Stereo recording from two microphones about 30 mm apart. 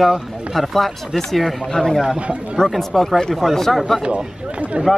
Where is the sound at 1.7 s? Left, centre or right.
Centre.